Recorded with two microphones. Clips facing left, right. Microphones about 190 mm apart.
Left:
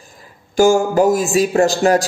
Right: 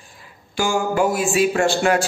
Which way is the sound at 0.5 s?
45° left (ahead or behind).